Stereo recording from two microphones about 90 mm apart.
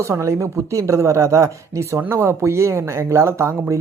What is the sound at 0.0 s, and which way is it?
Speech, 35° right (ahead or behind).